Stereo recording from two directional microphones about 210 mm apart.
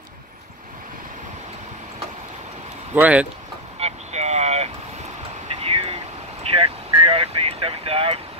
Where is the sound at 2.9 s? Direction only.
5° right (ahead or behind).